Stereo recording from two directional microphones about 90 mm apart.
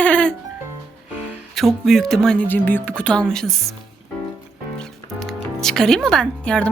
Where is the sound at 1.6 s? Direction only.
Centre (ahead or behind).